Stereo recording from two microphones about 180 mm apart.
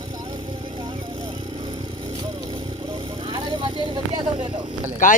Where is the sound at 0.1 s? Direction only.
25° right (ahead or behind).